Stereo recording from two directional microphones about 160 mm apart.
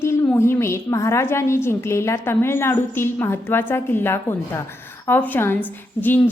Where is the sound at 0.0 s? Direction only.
15° left (ahead or behind).